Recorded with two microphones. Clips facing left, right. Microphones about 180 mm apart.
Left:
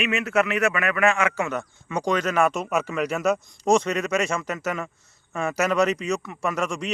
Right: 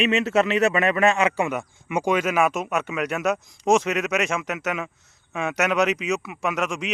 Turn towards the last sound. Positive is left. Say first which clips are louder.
# even
turn(degrees=0)  # may be behind; listen again after turning